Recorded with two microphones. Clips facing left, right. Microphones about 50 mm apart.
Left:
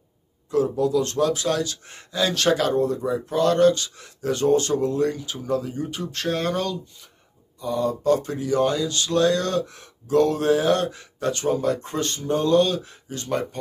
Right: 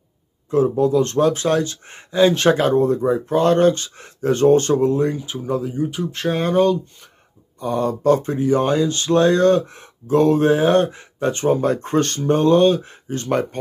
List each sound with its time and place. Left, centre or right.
0.5 s speech: right
5.6 s speech: centre
7.6 s speech: right